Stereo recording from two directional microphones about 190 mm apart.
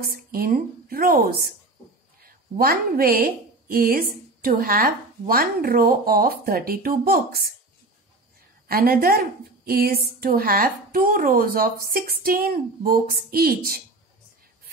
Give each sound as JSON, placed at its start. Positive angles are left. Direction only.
{"t": 0.0, "sound": "a woman's voice", "side_deg": -50}
{"t": 8.6, "sound": "a woman's voice", "side_deg": -50}